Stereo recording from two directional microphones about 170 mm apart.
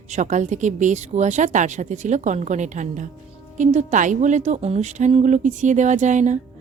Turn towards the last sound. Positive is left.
turn(degrees=-45)  # may be behind; listen again after turning